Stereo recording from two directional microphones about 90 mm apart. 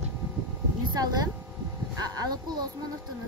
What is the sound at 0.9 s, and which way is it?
Speech, 50° right (ahead or behind).